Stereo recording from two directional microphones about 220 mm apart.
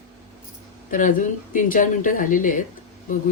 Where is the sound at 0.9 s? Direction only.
35° left (ahead or behind).